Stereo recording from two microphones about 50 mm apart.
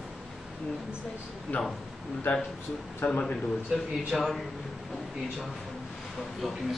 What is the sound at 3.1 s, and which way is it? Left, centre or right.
Speech, left.